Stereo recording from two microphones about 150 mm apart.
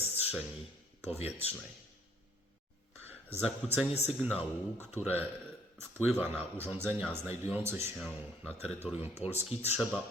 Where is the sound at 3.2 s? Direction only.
15° right (ahead or behind).